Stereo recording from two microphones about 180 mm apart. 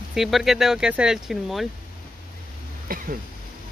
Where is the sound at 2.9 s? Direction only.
50° right (ahead or behind).